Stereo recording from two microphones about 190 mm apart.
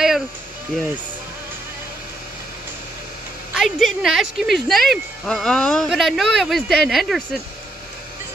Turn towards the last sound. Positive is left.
turn(degrees=0)  # may be behind; listen again after turning